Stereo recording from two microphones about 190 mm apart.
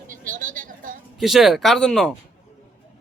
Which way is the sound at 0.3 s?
45° right (ahead or behind).